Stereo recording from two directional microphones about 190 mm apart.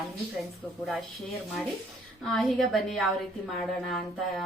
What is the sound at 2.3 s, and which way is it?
A woman's voice, 5° left (ahead or behind).